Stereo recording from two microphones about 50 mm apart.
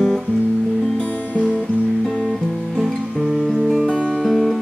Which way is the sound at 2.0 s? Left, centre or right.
Centre.